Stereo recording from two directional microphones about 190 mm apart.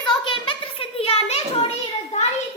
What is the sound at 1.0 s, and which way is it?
Children playing, 30° left (ahead or behind).